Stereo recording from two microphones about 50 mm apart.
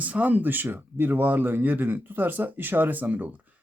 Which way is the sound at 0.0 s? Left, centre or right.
Right.